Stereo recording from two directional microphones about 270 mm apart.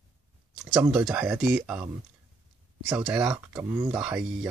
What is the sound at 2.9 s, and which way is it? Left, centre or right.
Speech, centre.